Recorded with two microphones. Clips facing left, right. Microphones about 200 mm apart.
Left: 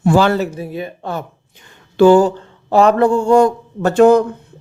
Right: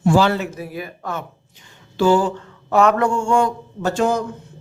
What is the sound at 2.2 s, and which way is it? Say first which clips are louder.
Mantra: left 7 dB; 35° left (ahead or behind).